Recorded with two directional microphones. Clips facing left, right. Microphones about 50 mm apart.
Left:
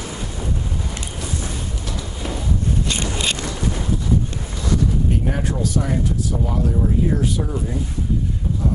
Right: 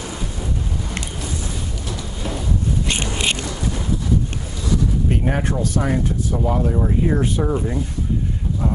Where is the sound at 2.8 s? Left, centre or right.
Right.